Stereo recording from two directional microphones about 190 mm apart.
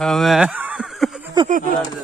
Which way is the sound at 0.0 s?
Centre (ahead or behind).